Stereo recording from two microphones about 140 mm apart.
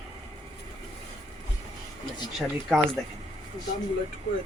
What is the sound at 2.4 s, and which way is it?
Speech, centre (ahead or behind).